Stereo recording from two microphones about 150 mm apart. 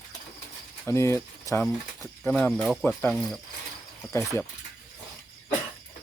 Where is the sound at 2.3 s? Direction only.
5° left (ahead or behind).